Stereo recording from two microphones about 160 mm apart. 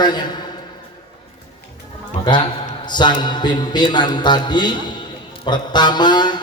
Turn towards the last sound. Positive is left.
turn(degrees=25)  # may be behind; listen again after turning